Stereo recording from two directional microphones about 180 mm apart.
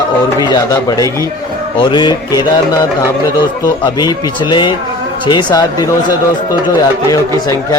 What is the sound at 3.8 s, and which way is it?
Speech, 25° left (ahead or behind).